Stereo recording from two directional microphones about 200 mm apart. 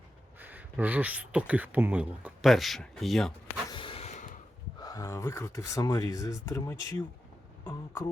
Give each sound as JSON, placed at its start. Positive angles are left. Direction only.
{"t": 0.3, "sound": "speech", "side_deg": -10}
{"t": 3.7, "sound": "a sound", "side_deg": 25}
{"t": 4.8, "sound": "speech", "side_deg": 20}